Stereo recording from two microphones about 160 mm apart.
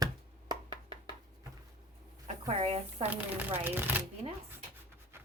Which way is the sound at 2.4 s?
40° right (ahead or behind).